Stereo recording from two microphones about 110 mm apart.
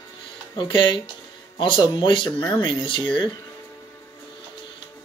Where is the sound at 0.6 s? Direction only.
50° left (ahead or behind).